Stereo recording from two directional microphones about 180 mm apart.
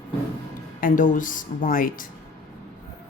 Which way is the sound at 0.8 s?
45° left (ahead or behind).